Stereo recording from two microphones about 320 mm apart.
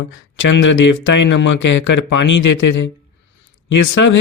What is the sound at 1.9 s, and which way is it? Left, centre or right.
Speech, left.